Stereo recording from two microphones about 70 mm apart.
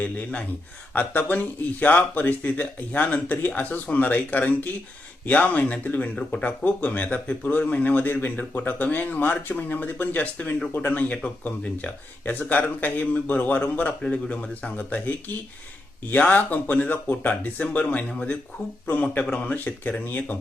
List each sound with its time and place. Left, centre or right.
0.0 s speech: left
16.1 s speech: left